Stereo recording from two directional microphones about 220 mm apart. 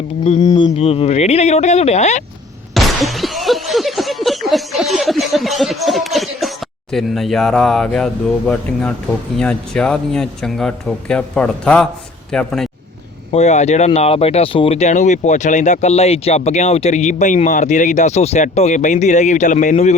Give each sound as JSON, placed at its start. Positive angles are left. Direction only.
{"t": 0.4, "sound": "speech", "side_deg": 20}
{"t": 2.7, "sound": "a sound", "side_deg": 0}
{"t": 9.4, "sound": "a man's voice", "side_deg": 5}
{"t": 13.3, "sound": "speech", "side_deg": 30}